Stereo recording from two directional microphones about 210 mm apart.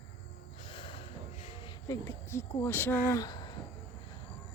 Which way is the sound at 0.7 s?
25° left (ahead or behind).